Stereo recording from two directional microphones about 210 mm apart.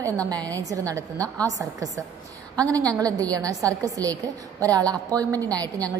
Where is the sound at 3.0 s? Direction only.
15° right (ahead or behind).